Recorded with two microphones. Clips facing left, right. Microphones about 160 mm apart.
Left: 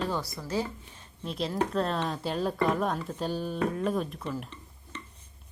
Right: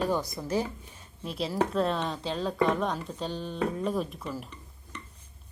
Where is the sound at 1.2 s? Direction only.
Centre (ahead or behind).